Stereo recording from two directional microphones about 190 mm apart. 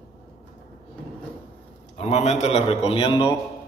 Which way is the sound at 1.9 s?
35° left (ahead or behind).